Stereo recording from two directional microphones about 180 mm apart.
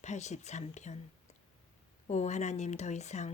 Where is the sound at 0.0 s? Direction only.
40° left (ahead or behind).